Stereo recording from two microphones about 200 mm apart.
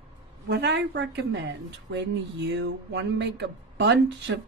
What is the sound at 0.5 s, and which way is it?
A woman's voice, 60° right (ahead or behind).